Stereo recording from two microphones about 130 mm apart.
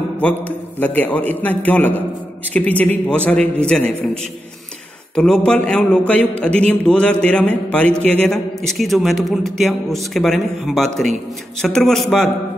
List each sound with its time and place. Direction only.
0.7 s a man's voice: 15° left (ahead or behind)